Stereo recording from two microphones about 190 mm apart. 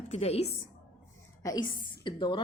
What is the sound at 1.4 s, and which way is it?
A woman's voice, 20° left (ahead or behind).